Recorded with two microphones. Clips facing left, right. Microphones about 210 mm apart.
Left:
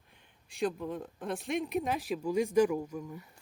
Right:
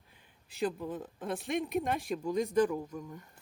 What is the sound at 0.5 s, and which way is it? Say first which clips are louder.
Speech: left 1 dB; centre (ahead or behind).